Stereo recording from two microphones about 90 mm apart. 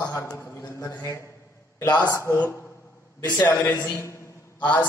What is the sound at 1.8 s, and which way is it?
Speech, 50° left (ahead or behind).